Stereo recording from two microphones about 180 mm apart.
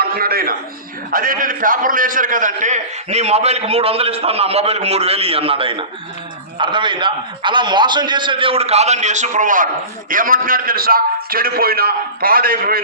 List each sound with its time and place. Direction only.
0.0 s a man's voice: 55° right (ahead or behind)